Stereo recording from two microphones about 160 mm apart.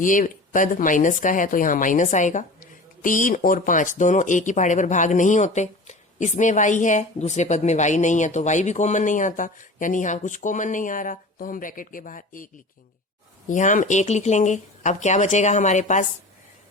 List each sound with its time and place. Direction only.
0.0 s speech: 55° left (ahead or behind)
13.5 s speech: 50° left (ahead or behind)